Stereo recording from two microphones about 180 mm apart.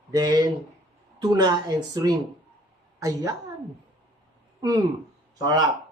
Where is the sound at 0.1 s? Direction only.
20° right (ahead or behind).